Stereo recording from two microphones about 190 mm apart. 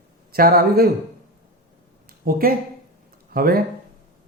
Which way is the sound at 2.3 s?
55° right (ahead or behind).